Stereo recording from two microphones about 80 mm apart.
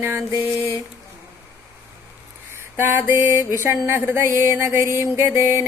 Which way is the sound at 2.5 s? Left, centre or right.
Right.